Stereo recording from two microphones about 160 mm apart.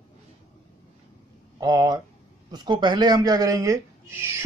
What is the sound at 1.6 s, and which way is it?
Speech, 20° right (ahead or behind).